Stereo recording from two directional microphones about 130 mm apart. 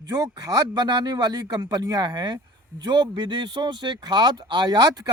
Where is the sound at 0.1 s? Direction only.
30° right (ahead or behind).